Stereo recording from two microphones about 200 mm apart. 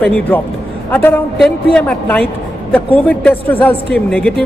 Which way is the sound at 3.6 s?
5° left (ahead or behind).